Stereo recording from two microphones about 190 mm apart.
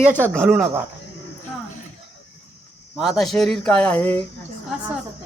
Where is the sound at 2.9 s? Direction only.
Centre (ahead or behind).